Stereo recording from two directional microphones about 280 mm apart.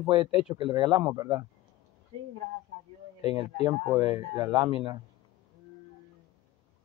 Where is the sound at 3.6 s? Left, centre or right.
Centre.